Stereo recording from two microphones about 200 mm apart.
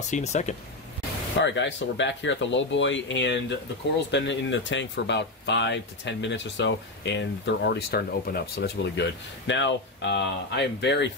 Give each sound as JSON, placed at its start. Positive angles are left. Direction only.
{"t": 0.1, "sound": "speech", "side_deg": 35}
{"t": 1.4, "sound": "speech", "side_deg": 65}
{"t": 9.5, "sound": "speech", "side_deg": 65}